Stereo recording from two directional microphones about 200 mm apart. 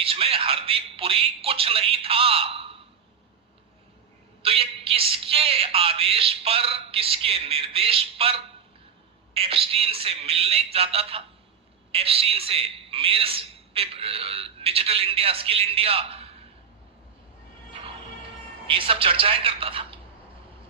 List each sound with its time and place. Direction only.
0.0 s a man's voice: 30° right (ahead or behind)
4.4 s a man's voice: 30° right (ahead or behind)
17.7 s music: 25° right (ahead or behind)
18.7 s a man's voice: 25° right (ahead or behind)